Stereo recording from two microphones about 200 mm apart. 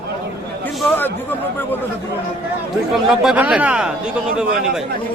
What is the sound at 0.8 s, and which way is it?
Speech, 10° left (ahead or behind).